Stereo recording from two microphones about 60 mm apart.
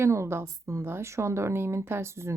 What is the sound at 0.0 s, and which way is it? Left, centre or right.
A woman's voice, right.